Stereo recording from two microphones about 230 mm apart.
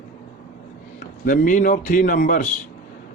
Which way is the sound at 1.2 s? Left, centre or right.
Left.